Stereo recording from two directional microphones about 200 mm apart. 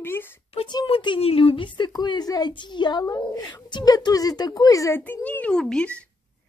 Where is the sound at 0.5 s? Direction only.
25° left (ahead or behind).